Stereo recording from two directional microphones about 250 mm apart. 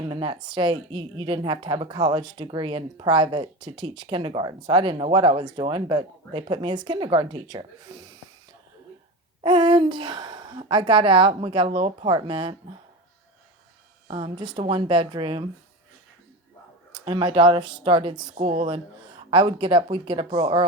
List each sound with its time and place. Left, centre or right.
0.1 s speech: centre
9.4 s speech: centre
14.1 s speech: centre
16.9 s speech: centre